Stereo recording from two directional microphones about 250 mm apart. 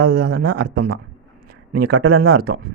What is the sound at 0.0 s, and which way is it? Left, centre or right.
Speech, right.